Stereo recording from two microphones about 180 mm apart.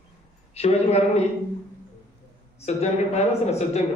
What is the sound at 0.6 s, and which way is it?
Speech, 35° left (ahead or behind).